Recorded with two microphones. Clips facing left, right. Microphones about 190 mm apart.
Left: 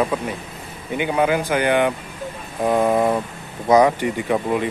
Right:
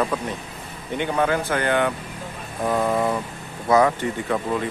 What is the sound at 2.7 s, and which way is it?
Vehicle, 20° left (ahead or behind).